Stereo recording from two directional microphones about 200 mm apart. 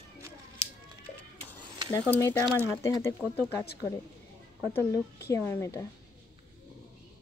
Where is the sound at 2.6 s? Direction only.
15° left (ahead or behind).